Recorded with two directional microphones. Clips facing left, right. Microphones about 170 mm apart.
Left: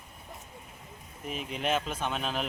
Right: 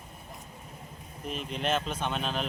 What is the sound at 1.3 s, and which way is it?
Speech, 5° left (ahead or behind).